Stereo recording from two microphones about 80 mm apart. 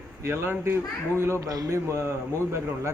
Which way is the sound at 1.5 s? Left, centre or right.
Right.